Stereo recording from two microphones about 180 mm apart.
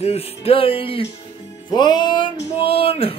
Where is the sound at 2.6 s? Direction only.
30° left (ahead or behind).